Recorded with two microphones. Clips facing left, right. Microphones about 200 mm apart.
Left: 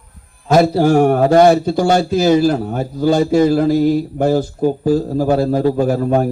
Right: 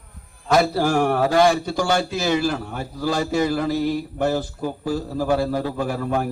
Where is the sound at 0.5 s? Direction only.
30° left (ahead or behind).